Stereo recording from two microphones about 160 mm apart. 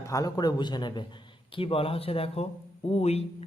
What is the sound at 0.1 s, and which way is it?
A man's voice, 25° left (ahead or behind).